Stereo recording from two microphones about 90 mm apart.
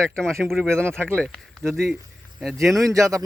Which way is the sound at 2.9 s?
35° right (ahead or behind).